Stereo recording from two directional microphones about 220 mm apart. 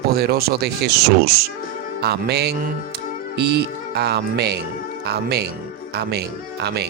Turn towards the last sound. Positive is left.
turn(degrees=-45)  # may be behind; listen again after turning